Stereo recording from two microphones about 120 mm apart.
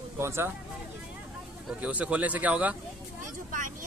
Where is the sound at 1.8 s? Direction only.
10° right (ahead or behind).